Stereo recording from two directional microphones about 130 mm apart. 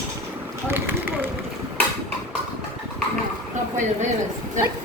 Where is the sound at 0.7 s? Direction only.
15° right (ahead or behind).